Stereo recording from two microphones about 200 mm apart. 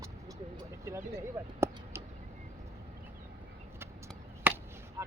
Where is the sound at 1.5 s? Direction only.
15° right (ahead or behind).